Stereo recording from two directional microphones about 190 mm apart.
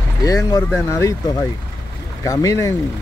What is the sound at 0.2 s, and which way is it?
Speech, 20° left (ahead or behind).